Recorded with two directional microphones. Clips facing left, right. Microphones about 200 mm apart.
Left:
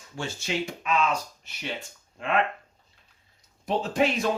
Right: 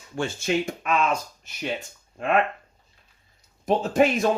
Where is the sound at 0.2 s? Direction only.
50° right (ahead or behind).